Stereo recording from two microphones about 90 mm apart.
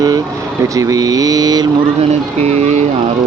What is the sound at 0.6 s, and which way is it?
Mantra, 40° right (ahead or behind).